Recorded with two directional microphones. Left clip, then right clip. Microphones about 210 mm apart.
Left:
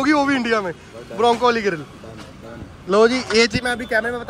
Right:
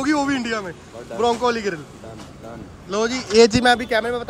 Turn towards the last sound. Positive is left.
turn(degrees=-20)  # may be behind; listen again after turning